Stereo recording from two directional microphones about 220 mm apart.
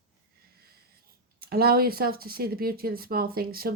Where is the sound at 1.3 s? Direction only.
45° right (ahead or behind).